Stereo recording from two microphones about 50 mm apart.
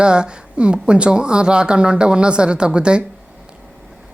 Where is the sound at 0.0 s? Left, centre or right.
Centre.